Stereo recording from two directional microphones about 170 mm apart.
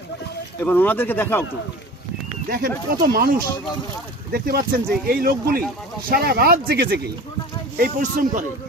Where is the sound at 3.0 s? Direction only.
60° right (ahead or behind).